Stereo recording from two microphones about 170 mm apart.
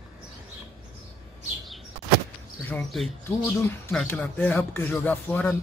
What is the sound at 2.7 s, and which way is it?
Speech, centre (ahead or behind).